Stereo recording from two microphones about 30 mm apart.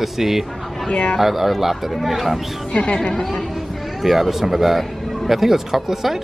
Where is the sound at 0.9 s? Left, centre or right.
Left.